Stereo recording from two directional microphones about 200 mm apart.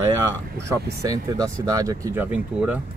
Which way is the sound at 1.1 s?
20° right (ahead or behind).